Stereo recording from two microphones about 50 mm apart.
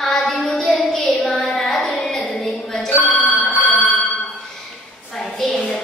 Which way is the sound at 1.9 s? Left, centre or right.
Centre.